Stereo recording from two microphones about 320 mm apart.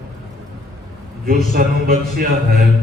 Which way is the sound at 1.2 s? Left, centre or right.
Right.